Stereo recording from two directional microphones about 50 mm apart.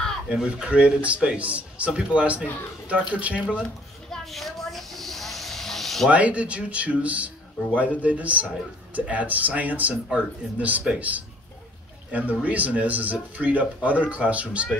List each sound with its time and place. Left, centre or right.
0.3 s speech: centre
4.1 s hiss: centre
6.0 s speech: right